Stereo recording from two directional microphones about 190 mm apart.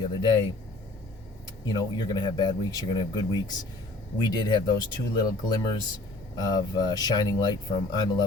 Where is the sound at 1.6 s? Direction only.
20° left (ahead or behind).